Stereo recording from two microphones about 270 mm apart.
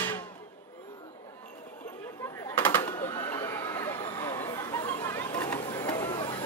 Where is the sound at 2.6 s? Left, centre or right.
Centre.